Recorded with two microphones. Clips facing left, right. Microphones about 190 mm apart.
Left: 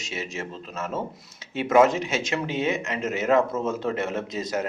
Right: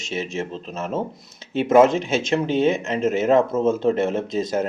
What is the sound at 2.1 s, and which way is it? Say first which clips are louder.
Speech: right 6 dB; 25° right (ahead or behind).